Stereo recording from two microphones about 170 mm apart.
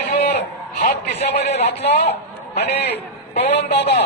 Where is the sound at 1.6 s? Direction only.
80° left.